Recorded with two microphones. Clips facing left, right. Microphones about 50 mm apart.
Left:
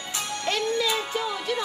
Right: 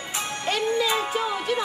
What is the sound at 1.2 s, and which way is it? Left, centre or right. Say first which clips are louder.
Speech: right 3 dB; centre.